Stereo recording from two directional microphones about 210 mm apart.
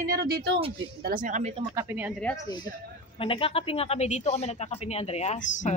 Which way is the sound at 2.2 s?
15° left (ahead or behind).